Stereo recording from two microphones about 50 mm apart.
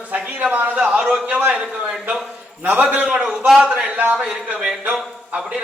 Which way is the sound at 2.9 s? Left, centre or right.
Right.